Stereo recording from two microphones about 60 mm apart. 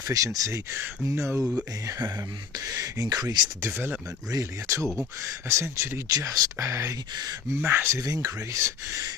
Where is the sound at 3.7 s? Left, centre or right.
Right.